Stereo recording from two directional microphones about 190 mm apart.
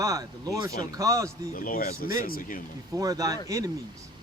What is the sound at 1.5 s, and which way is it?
Speech, 50° left (ahead or behind).